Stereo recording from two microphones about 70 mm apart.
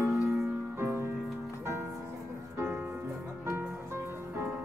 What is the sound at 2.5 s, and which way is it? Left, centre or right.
Music, right.